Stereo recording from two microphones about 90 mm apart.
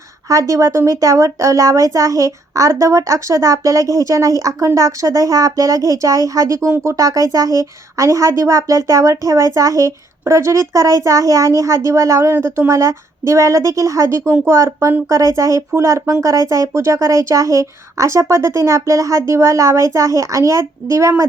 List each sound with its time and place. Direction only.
0.3 s speech: 35° right (ahead or behind)